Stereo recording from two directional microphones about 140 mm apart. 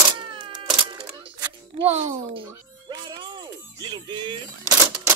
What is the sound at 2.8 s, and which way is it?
Music, 35° right (ahead or behind).